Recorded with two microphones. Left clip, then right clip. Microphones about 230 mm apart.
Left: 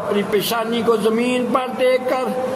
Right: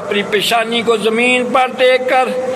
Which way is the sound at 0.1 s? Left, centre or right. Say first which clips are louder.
Right 6 dB; left.